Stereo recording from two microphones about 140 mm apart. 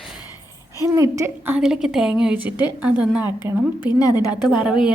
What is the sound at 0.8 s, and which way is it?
Speech, 25° right (ahead or behind).